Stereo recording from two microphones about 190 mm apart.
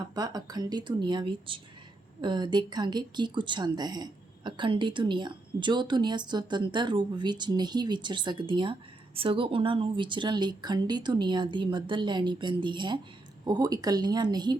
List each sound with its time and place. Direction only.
0.0 s a woman's voice: 20° right (ahead or behind)